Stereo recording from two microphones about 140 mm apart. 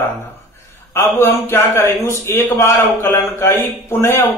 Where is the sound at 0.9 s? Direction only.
15° left (ahead or behind).